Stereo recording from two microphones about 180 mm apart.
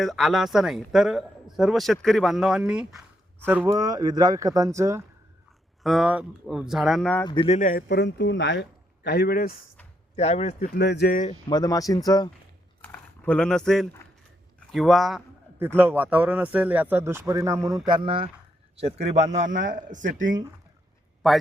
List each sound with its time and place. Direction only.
0.0 s speech: centre (ahead or behind); by 5.0 s 15° right (ahead or behind)
5.8 s speech: centre (ahead or behind)
7.3 s speech: 30° left (ahead or behind)
7.6 s speech: 50° left (ahead or behind); by 8.6 s 80° left
9.0 s speech: 60° left (ahead or behind)
10.2 s speech: 35° left (ahead or behind)
10.8 s speech: 65° left (ahead or behind)
11.4 s speech: 20° left (ahead or behind)
12.8 s typing: 10° left (ahead or behind)
14.7 s speech: centre (ahead or behind)
15.5 s a man's voice: 10° right (ahead or behind); by 20.1 s 45° right (ahead or behind)
21.2 s speech: centre (ahead or behind)